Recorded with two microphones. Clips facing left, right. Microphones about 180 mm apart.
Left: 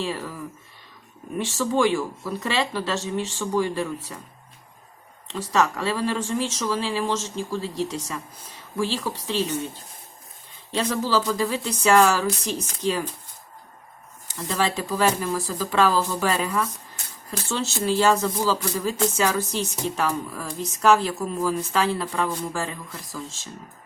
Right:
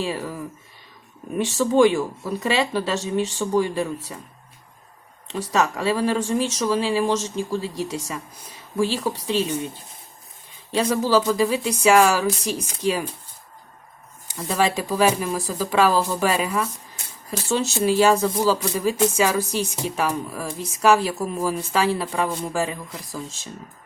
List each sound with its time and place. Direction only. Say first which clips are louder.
0.0 s speech: right 2 dB; 15° right (ahead or behind)
5.3 s speech: right 1 dB; 15° right (ahead or behind)
10.7 s speech: right 4 dB; 10° right (ahead or behind)
14.3 s speech: right 3 dB; 15° right (ahead or behind)